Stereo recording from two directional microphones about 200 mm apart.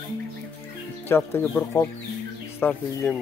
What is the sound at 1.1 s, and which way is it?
Speech, 10° left (ahead or behind).